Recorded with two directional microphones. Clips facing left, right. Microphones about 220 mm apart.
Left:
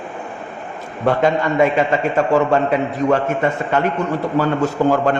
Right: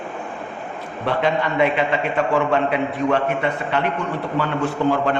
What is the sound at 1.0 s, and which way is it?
A man's voice, 45° left (ahead or behind).